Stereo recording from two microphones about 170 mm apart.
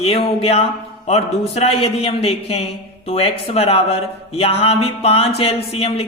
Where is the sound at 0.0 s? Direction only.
35° left (ahead or behind).